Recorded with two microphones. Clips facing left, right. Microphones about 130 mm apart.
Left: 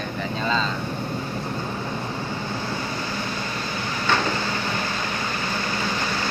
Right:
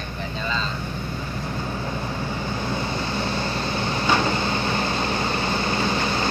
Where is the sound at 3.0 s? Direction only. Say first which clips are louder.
Right 3 dB; 30° right (ahead or behind).